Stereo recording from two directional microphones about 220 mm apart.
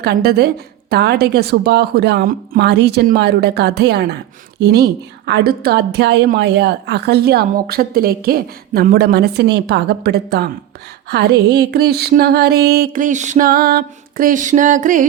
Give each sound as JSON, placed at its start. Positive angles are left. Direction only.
{"t": 0.0, "sound": "a woman's voice", "side_deg": -45}